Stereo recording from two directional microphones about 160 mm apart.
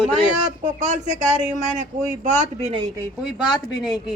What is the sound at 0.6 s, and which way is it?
Speech, 50° right (ahead or behind).